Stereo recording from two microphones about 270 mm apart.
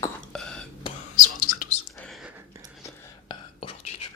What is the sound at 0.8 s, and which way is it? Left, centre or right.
Whispering, left.